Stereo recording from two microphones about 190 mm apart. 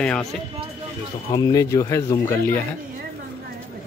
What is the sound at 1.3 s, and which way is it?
Speech, 20° left (ahead or behind).